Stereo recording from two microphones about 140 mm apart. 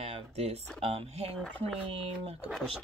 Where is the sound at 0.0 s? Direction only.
45° right (ahead or behind).